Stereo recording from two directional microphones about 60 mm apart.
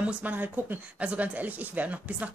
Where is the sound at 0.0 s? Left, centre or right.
Right.